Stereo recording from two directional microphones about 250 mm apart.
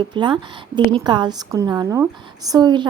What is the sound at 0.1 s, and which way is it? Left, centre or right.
A woman's voice, centre.